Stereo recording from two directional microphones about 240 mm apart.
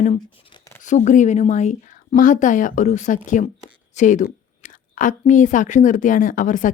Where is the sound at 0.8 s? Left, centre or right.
Left.